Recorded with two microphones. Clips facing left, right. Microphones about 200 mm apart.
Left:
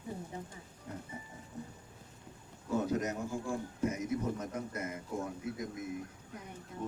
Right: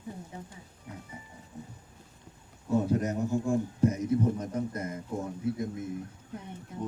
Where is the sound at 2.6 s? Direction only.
30° right (ahead or behind).